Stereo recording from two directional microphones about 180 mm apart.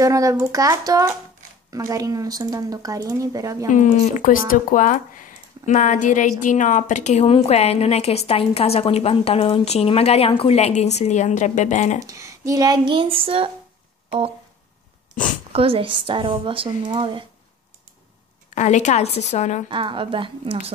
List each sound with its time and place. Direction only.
0.0 s speech: 20° right (ahead or behind)
3.7 s a woman's voice: 45° left (ahead or behind)
12.1 s speech: 15° right (ahead or behind)
15.5 s speech: 30° right (ahead or behind)
18.5 s a woman's voice: 40° left (ahead or behind)
19.7 s speech: 30° right (ahead or behind)